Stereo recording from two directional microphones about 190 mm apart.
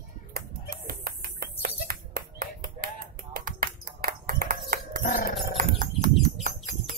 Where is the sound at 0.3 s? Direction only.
50° right (ahead or behind).